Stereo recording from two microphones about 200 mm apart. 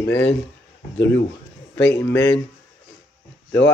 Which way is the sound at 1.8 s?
10° left (ahead or behind).